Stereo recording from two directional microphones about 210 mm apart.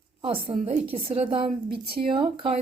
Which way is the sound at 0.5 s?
20° right (ahead or behind).